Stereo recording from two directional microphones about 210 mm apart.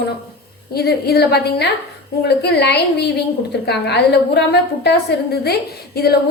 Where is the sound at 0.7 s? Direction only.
50° left (ahead or behind).